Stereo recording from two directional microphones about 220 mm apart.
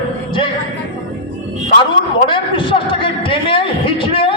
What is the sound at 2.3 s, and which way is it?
A man's voice, 20° left (ahead or behind).